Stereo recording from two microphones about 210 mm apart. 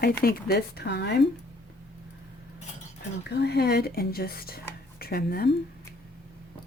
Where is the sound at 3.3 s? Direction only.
50° left (ahead or behind).